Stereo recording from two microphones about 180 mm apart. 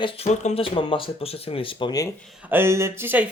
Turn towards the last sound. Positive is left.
turn(degrees=-10)  # may be behind; listen again after turning